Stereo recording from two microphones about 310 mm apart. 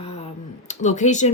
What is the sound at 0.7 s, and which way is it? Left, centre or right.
Speech, left.